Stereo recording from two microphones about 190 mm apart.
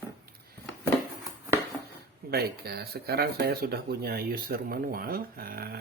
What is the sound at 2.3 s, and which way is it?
Speech, 55° right (ahead or behind).